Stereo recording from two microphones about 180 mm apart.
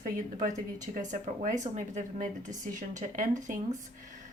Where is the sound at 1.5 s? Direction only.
40° right (ahead or behind).